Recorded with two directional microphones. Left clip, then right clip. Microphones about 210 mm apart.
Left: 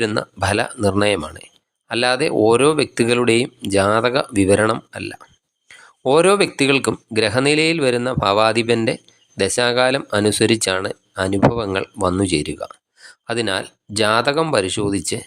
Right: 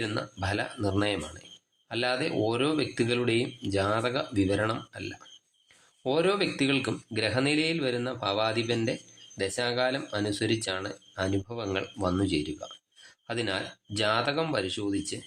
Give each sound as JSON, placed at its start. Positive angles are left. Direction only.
{"t": 0.0, "sound": "speech", "side_deg": 35}